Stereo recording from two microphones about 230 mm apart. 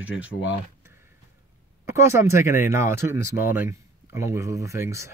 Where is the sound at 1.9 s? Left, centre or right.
Centre.